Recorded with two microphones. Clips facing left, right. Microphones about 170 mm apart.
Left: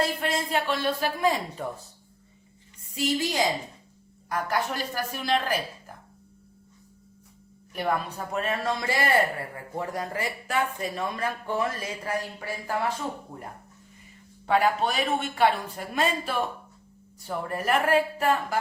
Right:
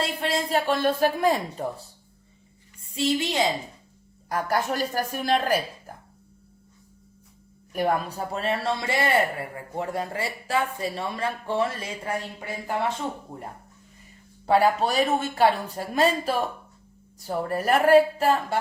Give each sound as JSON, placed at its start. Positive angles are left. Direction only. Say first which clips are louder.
{"t": 0.0, "sound": "a woman's voice", "louder": "even", "side_deg": -30}
{"t": 2.8, "sound": "a woman's voice", "louder": "right 2 dB", "side_deg": -30}
{"t": 4.3, "sound": "a woman's voice", "louder": "right 3 dB", "side_deg": -45}
{"t": 7.7, "sound": "speech", "louder": "right 3 dB", "side_deg": -45}
{"t": 14.4, "sound": "speech", "louder": "right 3 dB", "side_deg": -35}